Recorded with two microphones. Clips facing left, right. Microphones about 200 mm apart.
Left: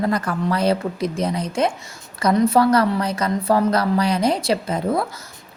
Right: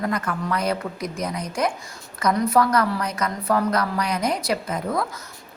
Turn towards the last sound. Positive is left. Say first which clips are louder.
# left 4 dB
turn(degrees=30)  # may be behind; listen again after turning